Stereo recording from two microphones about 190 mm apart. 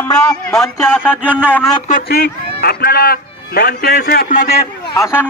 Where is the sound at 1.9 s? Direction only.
45° left (ahead or behind).